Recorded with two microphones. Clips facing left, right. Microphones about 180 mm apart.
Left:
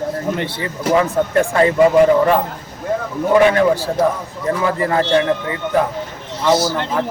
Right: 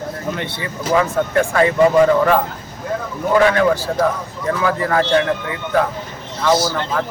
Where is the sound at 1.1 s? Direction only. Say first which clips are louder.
Left 1 dB; 20° left (ahead or behind).